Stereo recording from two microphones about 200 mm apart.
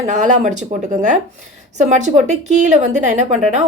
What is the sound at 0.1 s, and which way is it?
A woman's voice, 35° right (ahead or behind).